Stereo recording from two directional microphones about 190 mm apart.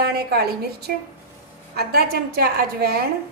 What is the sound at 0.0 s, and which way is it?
A woman's voice, 55° right (ahead or behind).